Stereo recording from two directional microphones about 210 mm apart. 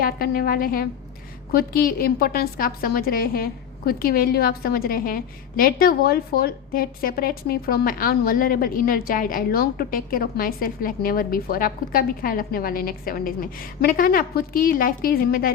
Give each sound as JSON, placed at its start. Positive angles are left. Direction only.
{"t": 0.0, "sound": "a woman's voice", "side_deg": 45}